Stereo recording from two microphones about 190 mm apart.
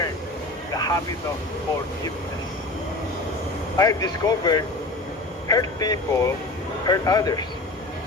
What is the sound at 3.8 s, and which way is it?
Speech, 20° left (ahead or behind).